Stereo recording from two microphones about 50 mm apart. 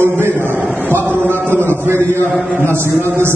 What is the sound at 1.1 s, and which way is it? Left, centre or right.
A man's voice, right.